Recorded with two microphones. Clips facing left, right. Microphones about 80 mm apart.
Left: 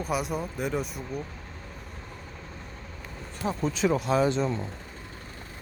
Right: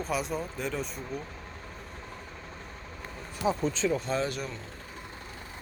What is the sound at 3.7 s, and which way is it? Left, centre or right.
Speech, centre.